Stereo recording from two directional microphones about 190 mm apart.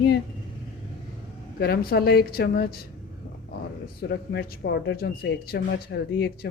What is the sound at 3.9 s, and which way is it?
Speech, 55° left (ahead or behind).